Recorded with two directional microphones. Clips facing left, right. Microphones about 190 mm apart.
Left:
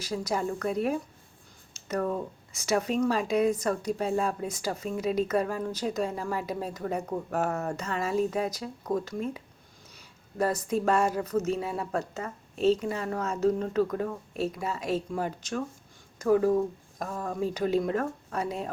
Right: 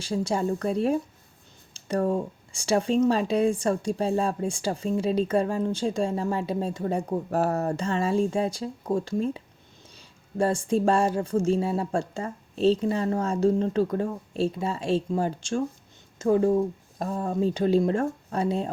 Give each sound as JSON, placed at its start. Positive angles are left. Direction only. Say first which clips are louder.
{"t": 0.0, "sound": "speech", "louder": "right 4 dB", "side_deg": -30}